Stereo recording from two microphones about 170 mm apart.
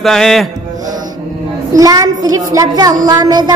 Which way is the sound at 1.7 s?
20° right (ahead or behind).